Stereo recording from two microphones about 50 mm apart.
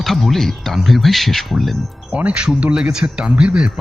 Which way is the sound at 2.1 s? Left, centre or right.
Right.